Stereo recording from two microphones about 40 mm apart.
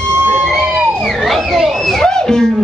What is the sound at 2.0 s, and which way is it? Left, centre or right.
Speech, centre.